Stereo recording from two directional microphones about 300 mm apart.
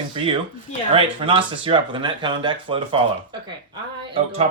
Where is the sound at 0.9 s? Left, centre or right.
Centre.